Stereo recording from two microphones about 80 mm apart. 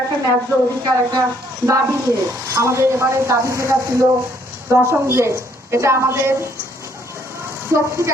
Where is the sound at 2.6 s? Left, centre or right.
Right.